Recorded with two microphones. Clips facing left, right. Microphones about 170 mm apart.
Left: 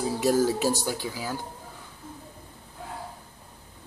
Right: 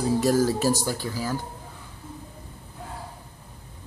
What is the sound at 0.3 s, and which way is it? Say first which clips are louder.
Speech: left 2 dB; 15° left (ahead or behind).